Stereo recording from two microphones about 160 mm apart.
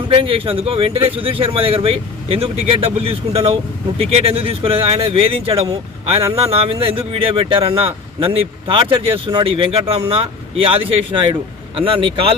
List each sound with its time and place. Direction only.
0.2 s speech: 35° right (ahead or behind)